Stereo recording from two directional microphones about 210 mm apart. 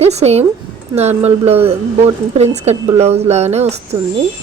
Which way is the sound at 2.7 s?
30° right (ahead or behind).